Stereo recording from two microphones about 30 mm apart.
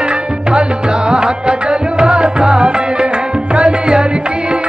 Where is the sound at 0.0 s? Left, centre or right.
Right.